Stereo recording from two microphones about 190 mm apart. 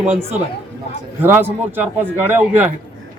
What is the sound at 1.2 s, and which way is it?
Speech, 10° right (ahead or behind).